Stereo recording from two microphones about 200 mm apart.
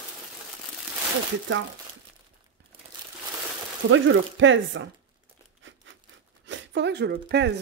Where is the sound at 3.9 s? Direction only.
70° right (ahead or behind).